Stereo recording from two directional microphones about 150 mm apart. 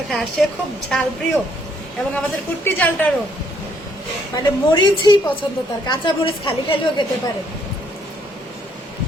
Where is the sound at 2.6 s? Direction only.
10° left (ahead or behind).